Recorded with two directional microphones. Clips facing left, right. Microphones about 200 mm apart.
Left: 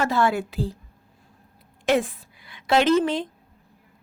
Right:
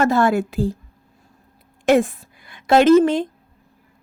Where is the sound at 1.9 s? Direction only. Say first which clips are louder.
Right 6 dB; 45° right (ahead or behind).